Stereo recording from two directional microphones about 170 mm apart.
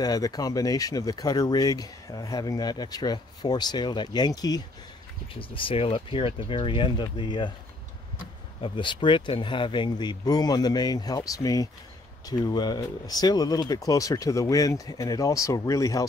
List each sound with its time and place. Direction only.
0.0 s speech: 25° left (ahead or behind)
8.6 s speech: 30° left (ahead or behind)